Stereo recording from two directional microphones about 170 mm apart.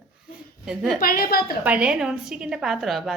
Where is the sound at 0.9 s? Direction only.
60° left (ahead or behind).